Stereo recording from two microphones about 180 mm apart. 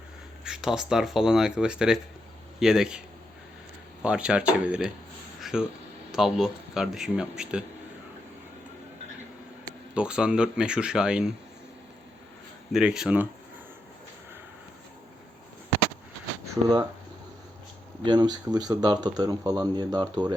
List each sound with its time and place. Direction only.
0.4 s speech: 5° right (ahead or behind)
4.0 s speech: 5° right (ahead or behind)
5.4 s a sound: 5° right (ahead or behind)
6.1 s speech: centre (ahead or behind)
9.9 s speech: 5° right (ahead or behind)
12.7 s speech: 5° right (ahead or behind)
18.0 s speech: 25° right (ahead or behind)